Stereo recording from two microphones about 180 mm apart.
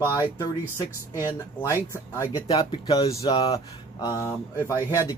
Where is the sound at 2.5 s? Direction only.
30° left (ahead or behind).